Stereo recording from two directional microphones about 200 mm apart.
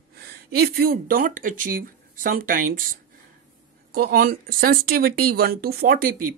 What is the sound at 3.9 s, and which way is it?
Speech, 45° right (ahead or behind).